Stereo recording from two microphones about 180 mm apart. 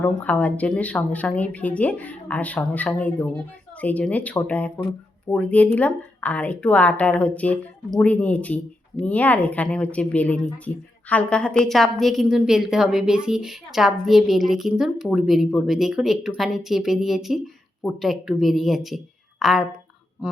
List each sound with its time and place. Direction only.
0.0 s a woman's voice: 10° left (ahead or behind); by 20.4 s 5° right (ahead or behind)